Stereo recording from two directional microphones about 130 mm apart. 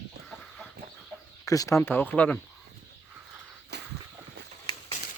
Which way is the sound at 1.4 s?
25° left (ahead or behind).